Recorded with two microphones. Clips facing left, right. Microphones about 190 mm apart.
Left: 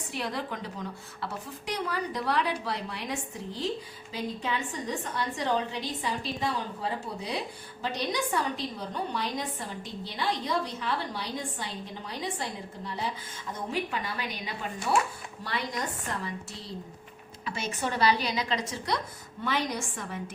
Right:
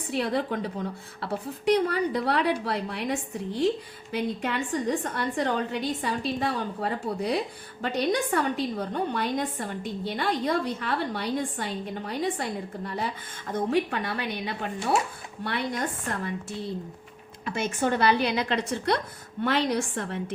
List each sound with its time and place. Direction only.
0.1 s a woman's voice: 60° right (ahead or behind)
4.1 s a woman's voice: 65° right (ahead or behind)